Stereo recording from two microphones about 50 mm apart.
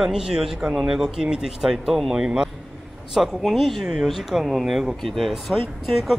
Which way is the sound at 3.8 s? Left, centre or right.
Centre.